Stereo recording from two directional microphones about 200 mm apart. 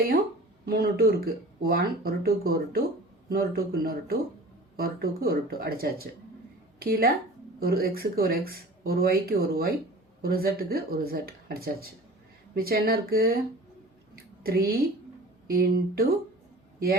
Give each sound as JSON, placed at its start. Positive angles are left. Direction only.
{"t": 0.6, "sound": "a woman's voice", "side_deg": -50}
{"t": 14.4, "sound": "speech", "side_deg": -50}